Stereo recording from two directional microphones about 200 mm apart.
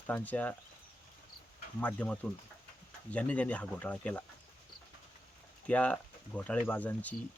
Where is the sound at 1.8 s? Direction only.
5° left (ahead or behind).